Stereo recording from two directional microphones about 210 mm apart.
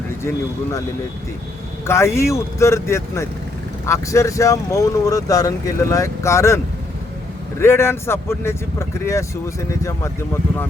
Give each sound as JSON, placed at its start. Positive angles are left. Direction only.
{"t": 1.9, "sound": "speech", "side_deg": 15}
{"t": 7.6, "sound": "speech", "side_deg": 10}